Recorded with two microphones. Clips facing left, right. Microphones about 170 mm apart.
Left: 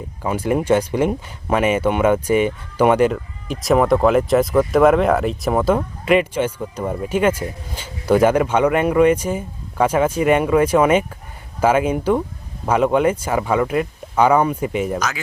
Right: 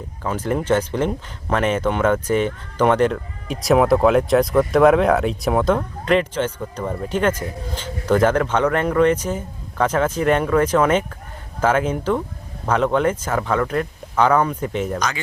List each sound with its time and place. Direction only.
0.2 s speech: 10° left (ahead or behind)